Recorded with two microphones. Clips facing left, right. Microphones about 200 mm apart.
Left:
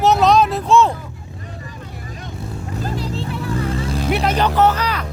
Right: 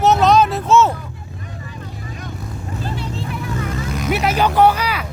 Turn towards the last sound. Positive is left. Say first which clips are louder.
# right 2 dB
turn(degrees=-10)  # may be behind; listen again after turning